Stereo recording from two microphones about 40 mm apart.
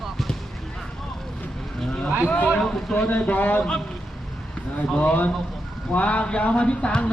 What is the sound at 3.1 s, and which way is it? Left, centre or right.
Speech, left.